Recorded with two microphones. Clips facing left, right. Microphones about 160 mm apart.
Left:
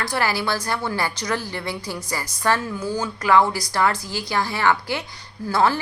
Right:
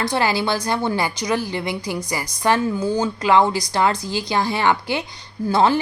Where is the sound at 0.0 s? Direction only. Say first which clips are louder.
Right 3 dB; 20° right (ahead or behind).